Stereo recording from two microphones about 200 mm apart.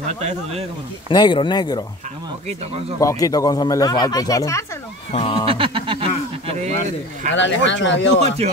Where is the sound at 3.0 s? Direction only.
15° left (ahead or behind).